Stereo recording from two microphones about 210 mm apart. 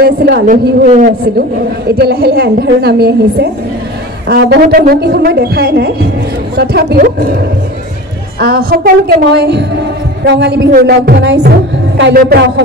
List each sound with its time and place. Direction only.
0.0 s a woman's voice: 50° right (ahead or behind)
2.0 s a woman's voice: 50° right (ahead or behind)
8.4 s a woman's voice: 50° right (ahead or behind)